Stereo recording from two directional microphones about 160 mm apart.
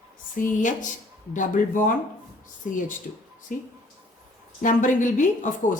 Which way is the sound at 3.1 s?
55° left (ahead or behind).